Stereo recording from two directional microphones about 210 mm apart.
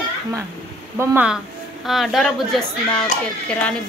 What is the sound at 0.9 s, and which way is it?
A woman's voice, 10° right (ahead or behind).